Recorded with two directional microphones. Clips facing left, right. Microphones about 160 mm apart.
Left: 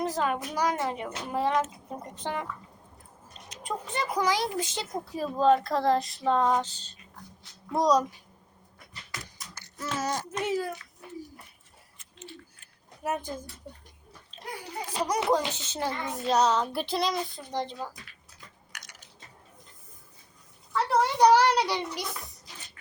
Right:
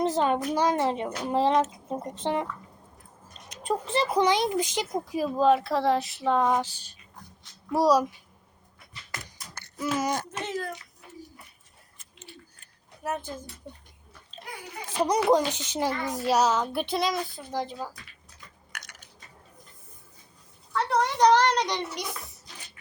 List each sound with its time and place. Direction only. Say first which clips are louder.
0.0 s a child's voice: right 4 dB; 25° right (ahead or behind)
3.6 s speech: right 6 dB; 30° right (ahead or behind); by 8.0 s 5° right (ahead or behind)
9.4 s a sound: right 7 dB; centre (ahead or behind)
10.4 s a woman's voice: left 4 dB; 10° left (ahead or behind)
11.9 s a sound: left 4 dB; 40° right (ahead or behind)
13.0 s a woman's voice: left 1 dB; 10° left (ahead or behind)
14.8 s speech: right 4 dB; 25° right (ahead or behind); by 17.9 s 5° right (ahead or behind)
18.7 s a sound: right 5 dB; 55° right (ahead or behind)
20.7 s a woman's voice: left 1 dB; 5° left (ahead or behind)